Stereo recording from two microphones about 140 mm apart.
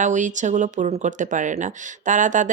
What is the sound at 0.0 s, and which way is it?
Speech, 60° right (ahead or behind).